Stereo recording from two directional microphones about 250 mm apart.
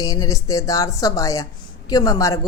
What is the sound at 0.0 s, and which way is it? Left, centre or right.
Speech, centre.